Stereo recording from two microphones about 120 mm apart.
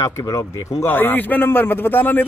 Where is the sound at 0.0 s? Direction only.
30° left (ahead or behind).